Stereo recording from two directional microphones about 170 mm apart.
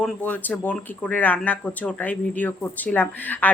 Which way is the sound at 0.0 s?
10° left (ahead or behind).